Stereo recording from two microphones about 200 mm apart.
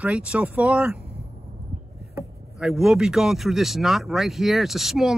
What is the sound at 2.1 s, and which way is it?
Speech, 5° right (ahead or behind).